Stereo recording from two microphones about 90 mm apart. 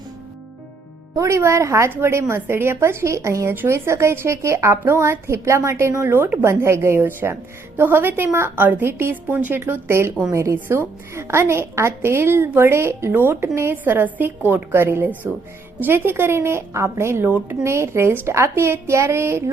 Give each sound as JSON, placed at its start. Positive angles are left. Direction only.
{"t": 1.1, "sound": "a woman's voice", "side_deg": -35}